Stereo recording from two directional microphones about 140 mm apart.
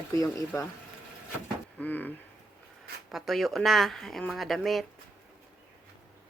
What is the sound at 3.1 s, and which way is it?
Speech, centre (ahead or behind).